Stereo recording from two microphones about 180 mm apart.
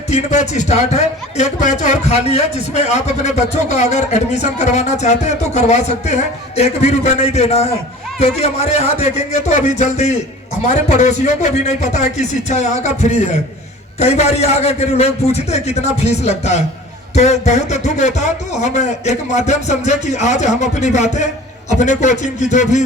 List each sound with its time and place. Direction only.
0.1 s a man's voice: 40° left (ahead or behind)